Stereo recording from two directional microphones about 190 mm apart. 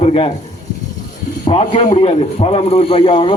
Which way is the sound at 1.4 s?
30° left (ahead or behind).